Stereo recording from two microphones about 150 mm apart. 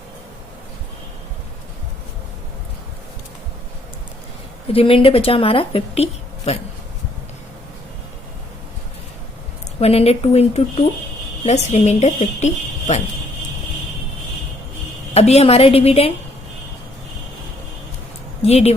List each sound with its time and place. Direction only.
4.7 s a woman's voice: 40° left (ahead or behind)
9.8 s a woman's voice: 40° left (ahead or behind)
15.1 s a woman's voice: 45° left (ahead or behind)
18.4 s a woman's voice: 45° left (ahead or behind)